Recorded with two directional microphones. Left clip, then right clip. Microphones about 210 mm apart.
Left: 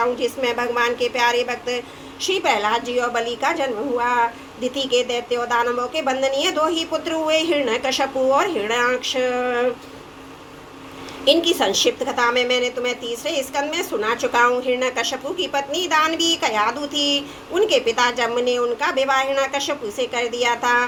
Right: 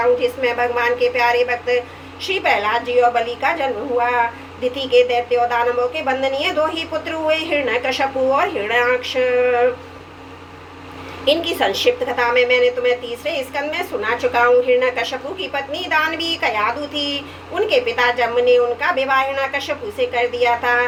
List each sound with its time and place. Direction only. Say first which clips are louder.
0.2 s a woman's voice: right 3 dB; 50° left (ahead or behind)
11.3 s a woman's voice: even; 50° left (ahead or behind)